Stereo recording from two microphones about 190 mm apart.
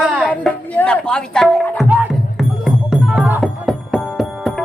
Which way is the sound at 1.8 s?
5° right (ahead or behind).